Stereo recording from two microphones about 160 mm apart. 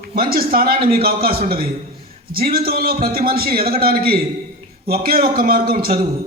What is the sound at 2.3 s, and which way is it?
A man's voice, 70° right (ahead or behind).